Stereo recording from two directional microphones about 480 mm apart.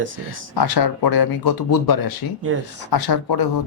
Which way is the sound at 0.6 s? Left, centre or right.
Left.